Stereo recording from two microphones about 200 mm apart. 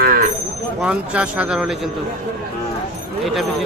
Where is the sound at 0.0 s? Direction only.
45° right (ahead or behind).